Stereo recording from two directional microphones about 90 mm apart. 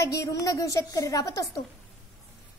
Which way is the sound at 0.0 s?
35° left (ahead or behind).